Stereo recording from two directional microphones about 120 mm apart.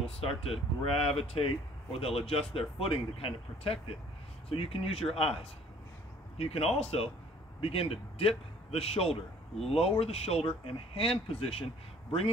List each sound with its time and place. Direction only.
0.0 s speech: 55° left (ahead or behind)
6.3 s a man's voice: 55° left (ahead or behind)